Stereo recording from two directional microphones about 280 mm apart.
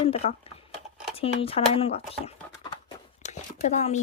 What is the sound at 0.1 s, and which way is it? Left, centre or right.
Speech, left.